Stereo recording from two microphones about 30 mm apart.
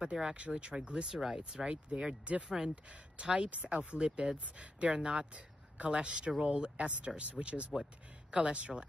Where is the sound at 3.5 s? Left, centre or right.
Right.